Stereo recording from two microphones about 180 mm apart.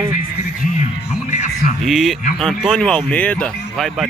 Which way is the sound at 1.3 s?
45° left (ahead or behind).